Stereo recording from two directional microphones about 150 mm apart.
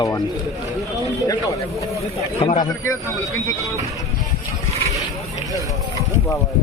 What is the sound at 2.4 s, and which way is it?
Speech, 50° left (ahead or behind).